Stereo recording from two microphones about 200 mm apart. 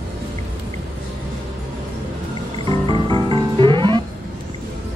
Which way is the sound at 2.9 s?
25° right (ahead or behind).